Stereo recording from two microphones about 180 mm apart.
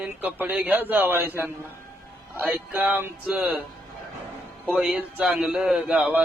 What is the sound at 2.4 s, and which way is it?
Speech, 10° right (ahead or behind).